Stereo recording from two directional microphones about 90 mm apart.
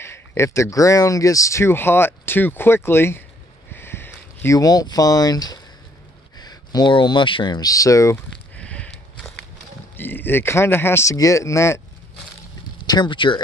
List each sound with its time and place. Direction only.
0.0 s speech: 30° left (ahead or behind)
3.7 s a sound: 25° left (ahead or behind)
4.6 s speech: 45° left (ahead or behind); by 7.6 s 65° left (ahead or behind)
7.6 s speech: 40° left (ahead or behind)
8.5 s a sound: 15° left (ahead or behind)
9.9 s speech: 20° left (ahead or behind)
12.8 s speech: 50° left (ahead or behind)